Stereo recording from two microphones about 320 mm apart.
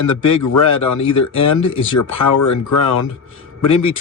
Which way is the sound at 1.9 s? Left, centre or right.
Left.